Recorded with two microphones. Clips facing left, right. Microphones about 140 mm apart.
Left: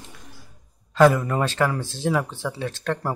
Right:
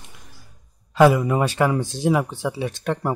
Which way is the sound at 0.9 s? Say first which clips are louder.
Right 1 dB; 10° right (ahead or behind).